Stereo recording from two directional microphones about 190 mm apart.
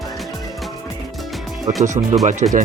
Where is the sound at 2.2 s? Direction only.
40° right (ahead or behind).